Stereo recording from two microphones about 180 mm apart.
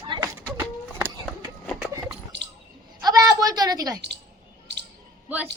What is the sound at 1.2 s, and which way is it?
Run, 10° left (ahead or behind).